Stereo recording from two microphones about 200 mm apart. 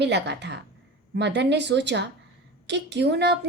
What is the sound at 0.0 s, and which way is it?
Speech, 60° right (ahead or behind).